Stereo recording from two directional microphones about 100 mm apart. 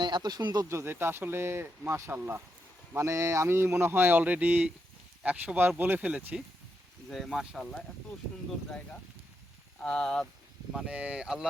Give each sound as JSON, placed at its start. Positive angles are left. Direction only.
{"t": 0.0, "sound": "speech", "side_deg": -45}
{"t": 7.1, "sound": "speech", "side_deg": 0}
{"t": 9.8, "sound": "speech", "side_deg": 10}
{"t": 10.8, "sound": "speech", "side_deg": -10}